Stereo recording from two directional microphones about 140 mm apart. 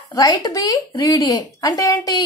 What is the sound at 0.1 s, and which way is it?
A woman's voice, 30° left (ahead or behind).